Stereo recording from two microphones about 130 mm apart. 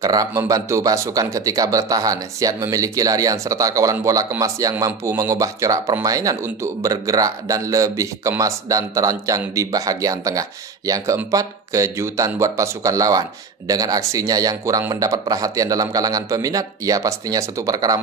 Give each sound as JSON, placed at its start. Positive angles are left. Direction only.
{"t": 0.0, "sound": "speech", "side_deg": -25}